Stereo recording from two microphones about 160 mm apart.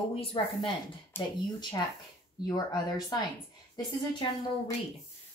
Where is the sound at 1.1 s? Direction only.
15° left (ahead or behind).